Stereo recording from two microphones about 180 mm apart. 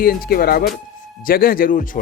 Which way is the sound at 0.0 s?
55° left (ahead or behind).